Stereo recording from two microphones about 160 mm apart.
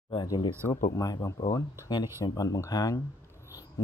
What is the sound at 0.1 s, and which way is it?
Speech, 30° left (ahead or behind).